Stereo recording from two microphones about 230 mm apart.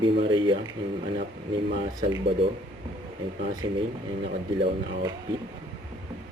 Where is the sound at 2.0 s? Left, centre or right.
Centre.